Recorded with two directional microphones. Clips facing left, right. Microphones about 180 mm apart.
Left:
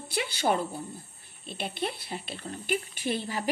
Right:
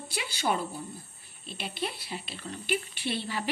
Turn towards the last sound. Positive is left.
turn(degrees=45)  # may be behind; listen again after turning